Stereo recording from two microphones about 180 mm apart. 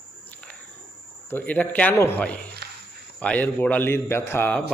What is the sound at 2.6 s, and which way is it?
Walk, 65° right (ahead or behind).